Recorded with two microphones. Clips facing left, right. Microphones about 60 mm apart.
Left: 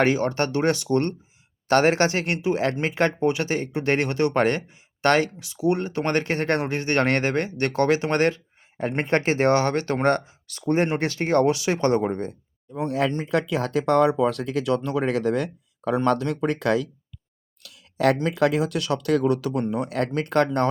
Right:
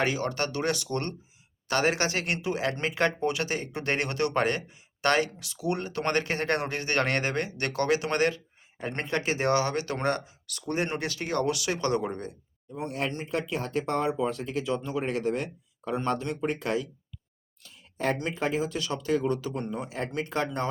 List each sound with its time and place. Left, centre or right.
0.0 s speech: left
13.3 s speech: left